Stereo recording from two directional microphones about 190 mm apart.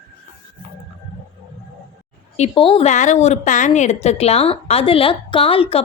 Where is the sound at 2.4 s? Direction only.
30° left (ahead or behind).